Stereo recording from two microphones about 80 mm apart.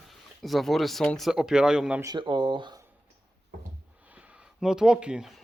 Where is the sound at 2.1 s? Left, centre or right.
Right.